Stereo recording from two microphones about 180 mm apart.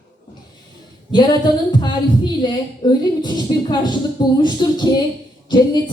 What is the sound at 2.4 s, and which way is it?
Speech, 25° left (ahead or behind).